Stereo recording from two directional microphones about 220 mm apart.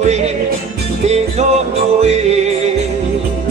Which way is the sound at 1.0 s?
30° right (ahead or behind).